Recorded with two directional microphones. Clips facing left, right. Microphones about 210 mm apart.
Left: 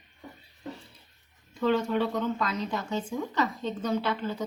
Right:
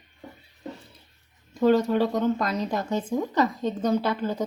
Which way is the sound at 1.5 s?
40° right (ahead or behind).